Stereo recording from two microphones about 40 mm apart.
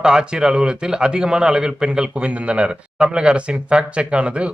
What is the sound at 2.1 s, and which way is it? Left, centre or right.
Speech, right.